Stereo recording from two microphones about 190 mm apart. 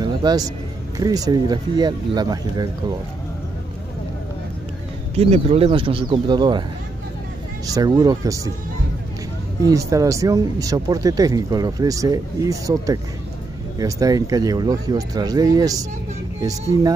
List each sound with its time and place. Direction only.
0.0 s music: 20° right (ahead or behind)
0.9 s speech: 20° right (ahead or behind)
5.1 s speech: 35° right (ahead or behind)
7.7 s speech: 20° right (ahead or behind)
9.6 s speech: 15° right (ahead or behind)